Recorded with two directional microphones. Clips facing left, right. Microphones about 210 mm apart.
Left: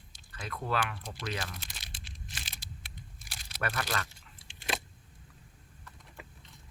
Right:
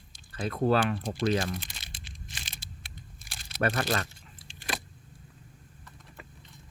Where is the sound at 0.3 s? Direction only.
35° right (ahead or behind).